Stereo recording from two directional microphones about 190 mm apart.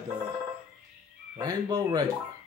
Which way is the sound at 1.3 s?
20° right (ahead or behind).